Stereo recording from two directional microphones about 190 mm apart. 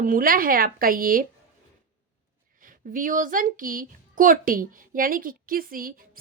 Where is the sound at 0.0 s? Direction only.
45° right (ahead or behind).